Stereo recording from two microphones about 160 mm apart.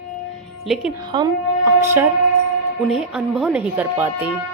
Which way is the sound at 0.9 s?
25° right (ahead or behind).